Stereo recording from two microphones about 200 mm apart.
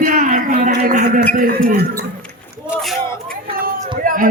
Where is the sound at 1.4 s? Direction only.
45° right (ahead or behind).